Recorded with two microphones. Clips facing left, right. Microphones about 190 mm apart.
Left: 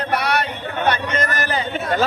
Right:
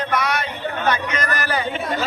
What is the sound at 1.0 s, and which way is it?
Speech, 45° left (ahead or behind).